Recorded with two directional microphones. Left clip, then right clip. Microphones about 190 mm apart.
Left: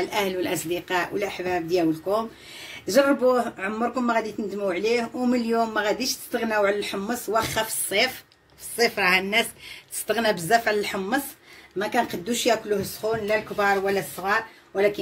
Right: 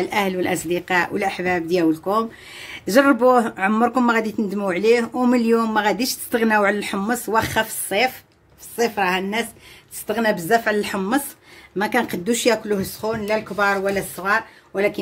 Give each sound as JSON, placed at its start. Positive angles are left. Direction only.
{"t": 0.0, "sound": "a woman's voice", "side_deg": -50}